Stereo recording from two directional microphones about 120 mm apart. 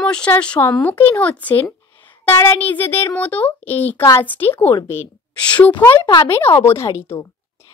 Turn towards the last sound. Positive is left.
turn(degrees=20)  # may be behind; listen again after turning